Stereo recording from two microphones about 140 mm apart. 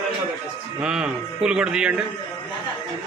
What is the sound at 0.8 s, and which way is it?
Speech, 5° right (ahead or behind).